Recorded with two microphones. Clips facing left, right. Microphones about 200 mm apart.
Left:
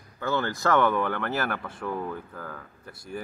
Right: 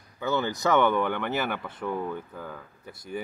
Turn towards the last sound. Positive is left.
turn(degrees=0)  # may be behind; listen again after turning